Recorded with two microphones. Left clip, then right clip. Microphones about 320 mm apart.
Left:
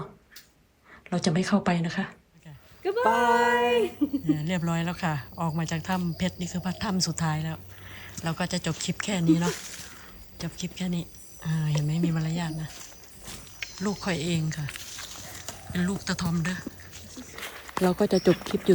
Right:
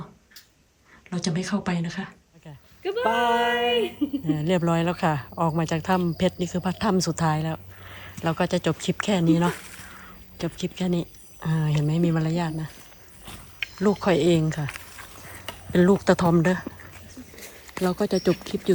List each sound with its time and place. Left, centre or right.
1.1 s speech: centre
13.7 s speech: centre
17.3 s speech: centre